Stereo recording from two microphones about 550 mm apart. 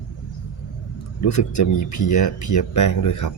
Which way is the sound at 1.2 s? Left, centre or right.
Left.